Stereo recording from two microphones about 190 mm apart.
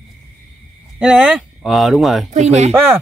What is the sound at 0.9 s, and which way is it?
Speech, 5° right (ahead or behind).